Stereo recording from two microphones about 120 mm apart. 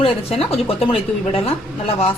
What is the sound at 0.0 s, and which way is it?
A woman's voice, 55° left (ahead or behind).